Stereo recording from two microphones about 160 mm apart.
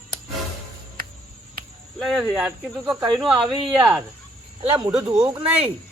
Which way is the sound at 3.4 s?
25° right (ahead or behind).